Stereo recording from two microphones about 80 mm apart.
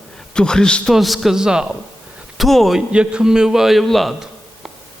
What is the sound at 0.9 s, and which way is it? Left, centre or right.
A man's voice, centre.